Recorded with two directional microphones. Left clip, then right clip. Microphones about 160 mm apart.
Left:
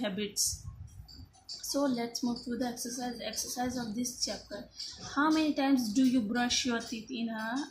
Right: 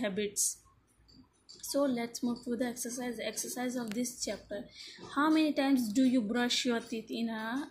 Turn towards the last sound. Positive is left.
turn(degrees=-20)  # may be behind; listen again after turning